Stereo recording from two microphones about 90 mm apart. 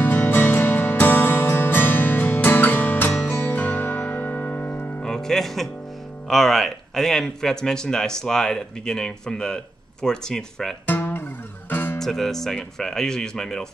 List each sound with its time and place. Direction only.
0.0 s music: 25° left (ahead or behind)
5.0 s music: 5° left (ahead or behind)
6.2 s speech: centre (ahead or behind)
10.9 s guitar: 20° left (ahead or behind)
11.7 s music: 25° left (ahead or behind)
12.0 s speech: 5° left (ahead or behind)